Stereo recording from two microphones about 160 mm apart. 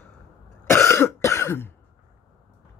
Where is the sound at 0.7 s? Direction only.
15° left (ahead or behind).